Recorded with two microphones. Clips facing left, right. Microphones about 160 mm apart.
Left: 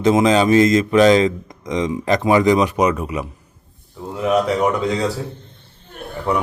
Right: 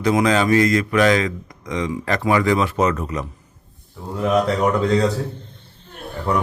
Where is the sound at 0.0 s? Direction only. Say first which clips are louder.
Left 3 dB; 25° left (ahead or behind).